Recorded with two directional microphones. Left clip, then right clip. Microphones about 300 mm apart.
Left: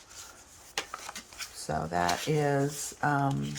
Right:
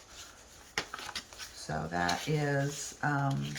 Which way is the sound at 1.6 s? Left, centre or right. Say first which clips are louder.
Left 4 dB; left.